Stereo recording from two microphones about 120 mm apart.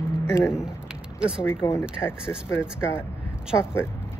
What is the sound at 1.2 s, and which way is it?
Speech, 5° right (ahead or behind).